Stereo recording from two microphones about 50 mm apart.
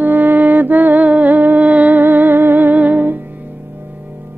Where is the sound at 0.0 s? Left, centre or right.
Right.